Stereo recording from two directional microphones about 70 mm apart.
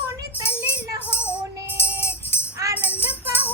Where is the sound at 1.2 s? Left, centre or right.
Centre.